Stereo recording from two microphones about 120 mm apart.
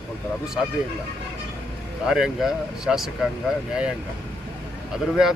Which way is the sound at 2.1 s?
5° right (ahead or behind).